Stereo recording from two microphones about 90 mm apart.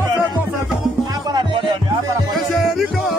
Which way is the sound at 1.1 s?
50° right (ahead or behind).